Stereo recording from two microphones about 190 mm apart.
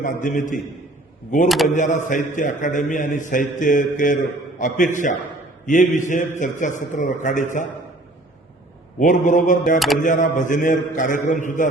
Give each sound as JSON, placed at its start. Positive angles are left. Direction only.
{"t": 0.0, "sound": "a man's voice", "side_deg": 45}
{"t": 1.5, "sound": "a sound", "side_deg": 0}
{"t": 1.7, "sound": "a man's voice", "side_deg": 40}
{"t": 9.0, "sound": "a man's voice", "side_deg": 40}
{"t": 9.7, "sound": "a sound", "side_deg": 0}
{"t": 10.0, "sound": "a man's voice", "side_deg": 40}